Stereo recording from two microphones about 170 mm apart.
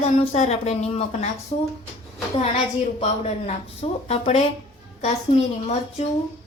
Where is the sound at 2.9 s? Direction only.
40° left (ahead or behind).